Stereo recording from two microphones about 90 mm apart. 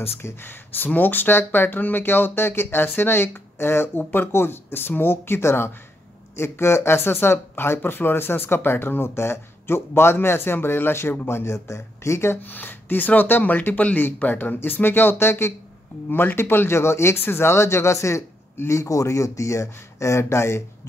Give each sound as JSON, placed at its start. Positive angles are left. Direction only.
{"t": 0.2, "sound": "speech", "side_deg": 25}